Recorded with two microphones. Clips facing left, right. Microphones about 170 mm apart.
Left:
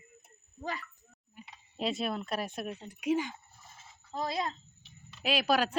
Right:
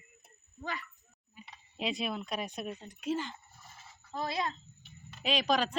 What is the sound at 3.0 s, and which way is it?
Speech, 10° left (ahead or behind).